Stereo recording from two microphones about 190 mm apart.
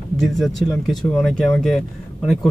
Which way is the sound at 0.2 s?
Centre (ahead or behind).